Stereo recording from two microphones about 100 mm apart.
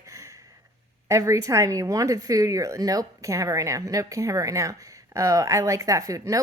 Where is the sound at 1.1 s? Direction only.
30° right (ahead or behind).